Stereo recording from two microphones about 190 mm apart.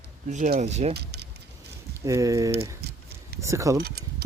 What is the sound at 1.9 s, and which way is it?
Speech, 15° right (ahead or behind).